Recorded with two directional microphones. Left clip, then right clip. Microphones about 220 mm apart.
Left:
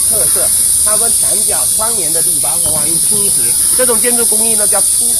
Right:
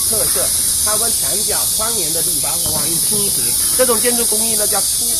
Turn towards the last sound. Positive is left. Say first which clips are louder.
# left 2 dB
turn(degrees=35)  # may be behind; listen again after turning